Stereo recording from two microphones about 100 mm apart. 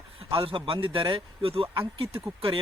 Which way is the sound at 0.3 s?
55° right (ahead or behind).